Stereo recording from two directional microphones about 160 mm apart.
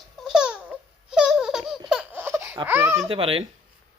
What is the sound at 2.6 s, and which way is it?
Speech, 15° right (ahead or behind).